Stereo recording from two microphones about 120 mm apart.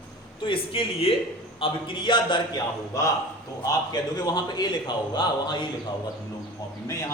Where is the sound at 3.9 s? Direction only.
35° left (ahead or behind).